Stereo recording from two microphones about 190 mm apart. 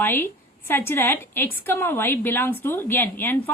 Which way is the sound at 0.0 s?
10° left (ahead or behind).